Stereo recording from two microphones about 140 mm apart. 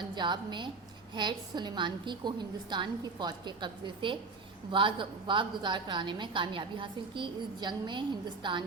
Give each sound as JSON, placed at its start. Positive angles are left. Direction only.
{"t": 0.0, "sound": "a woman's voice", "side_deg": -35}